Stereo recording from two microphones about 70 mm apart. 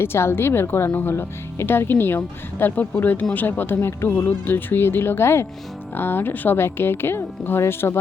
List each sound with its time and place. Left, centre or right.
0.0 s speech: left